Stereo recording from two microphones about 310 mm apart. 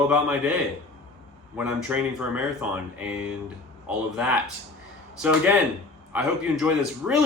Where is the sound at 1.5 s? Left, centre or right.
Centre.